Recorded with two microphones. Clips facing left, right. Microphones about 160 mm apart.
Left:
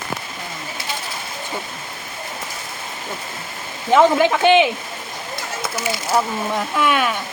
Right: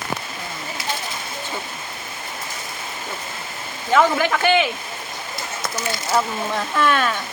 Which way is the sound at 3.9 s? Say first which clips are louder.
Left 4 dB; 20° left (ahead or behind).